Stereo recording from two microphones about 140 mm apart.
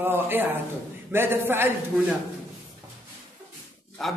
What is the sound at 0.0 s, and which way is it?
A man's voice, 15° right (ahead or behind).